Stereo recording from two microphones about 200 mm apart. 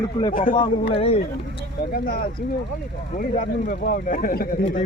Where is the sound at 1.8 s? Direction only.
50° left (ahead or behind).